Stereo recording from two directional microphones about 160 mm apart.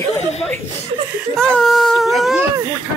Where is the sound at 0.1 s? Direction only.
45° left (ahead or behind).